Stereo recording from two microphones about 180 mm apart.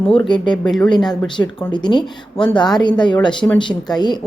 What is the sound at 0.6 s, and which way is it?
Speech, 5° left (ahead or behind).